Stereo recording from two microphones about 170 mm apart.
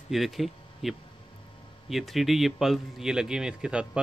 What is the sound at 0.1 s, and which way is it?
Speech, centre (ahead or behind).